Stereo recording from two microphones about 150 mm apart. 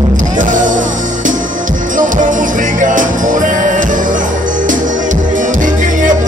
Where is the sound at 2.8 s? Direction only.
60° right (ahead or behind).